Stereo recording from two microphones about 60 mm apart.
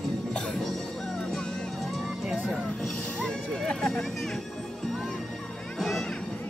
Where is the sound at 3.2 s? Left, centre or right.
Centre.